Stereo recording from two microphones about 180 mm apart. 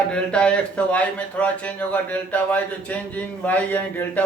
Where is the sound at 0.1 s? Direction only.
5° left (ahead or behind).